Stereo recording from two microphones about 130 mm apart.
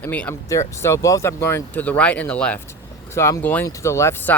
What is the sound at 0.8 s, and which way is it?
Speech, 25° left (ahead or behind).